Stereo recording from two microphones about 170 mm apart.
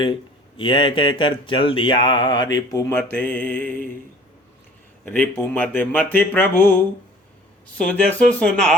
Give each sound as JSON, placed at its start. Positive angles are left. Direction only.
{"t": 0.0, "sound": "speech", "side_deg": 30}
{"t": 3.0, "sound": "speech", "side_deg": 10}
{"t": 5.0, "sound": "speech", "side_deg": 10}
{"t": 7.8, "sound": "speech", "side_deg": 5}